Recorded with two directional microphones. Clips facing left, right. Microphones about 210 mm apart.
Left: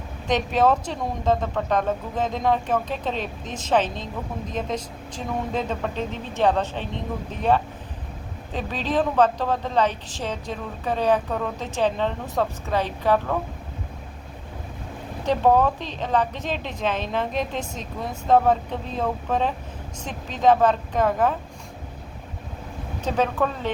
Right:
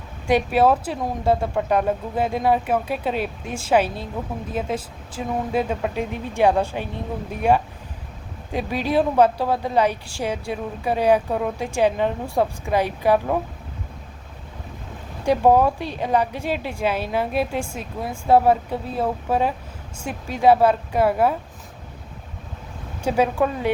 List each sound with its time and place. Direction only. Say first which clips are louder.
0.3 s a woman's voice: right 3 dB; 10° right (ahead or behind)
15.2 s a woman's voice: right 3 dB; 10° right (ahead or behind)
23.0 s a woman's voice: right 3 dB; 10° right (ahead or behind)